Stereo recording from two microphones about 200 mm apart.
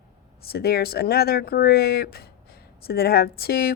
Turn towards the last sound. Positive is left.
turn(degrees=50)  # may be behind; listen again after turning